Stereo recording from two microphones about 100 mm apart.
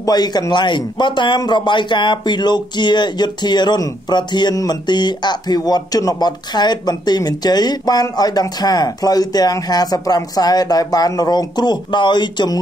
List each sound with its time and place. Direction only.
0.0 s a man's voice: 45° left (ahead or behind)